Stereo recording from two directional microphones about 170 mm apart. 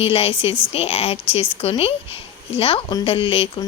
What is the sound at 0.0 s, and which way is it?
Speech, 30° left (ahead or behind).